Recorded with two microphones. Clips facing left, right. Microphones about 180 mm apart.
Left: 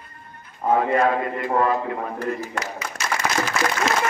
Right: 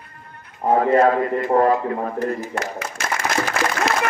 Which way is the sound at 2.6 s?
50° right (ahead or behind).